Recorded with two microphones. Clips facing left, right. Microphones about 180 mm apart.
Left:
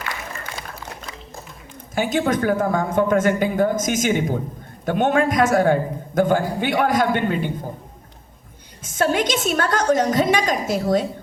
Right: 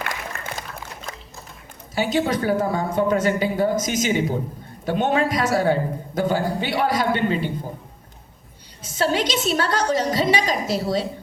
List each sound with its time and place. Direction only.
0.3 s a sound: 60° right (ahead or behind)
2.0 s a man's voice: 50° left (ahead or behind)
8.8 s a man's voice: 50° left (ahead or behind)